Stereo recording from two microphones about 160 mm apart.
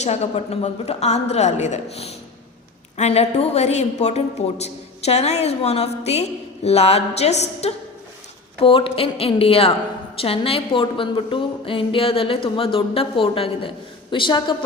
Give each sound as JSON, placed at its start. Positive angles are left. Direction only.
{"t": 0.0, "sound": "a woman's voice", "side_deg": 40}